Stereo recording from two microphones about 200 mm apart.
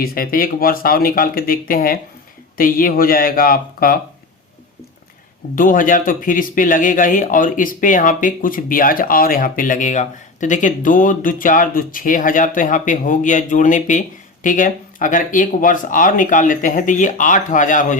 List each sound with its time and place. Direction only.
0.0 s speech: 45° left (ahead or behind)
5.5 s speech: 45° left (ahead or behind)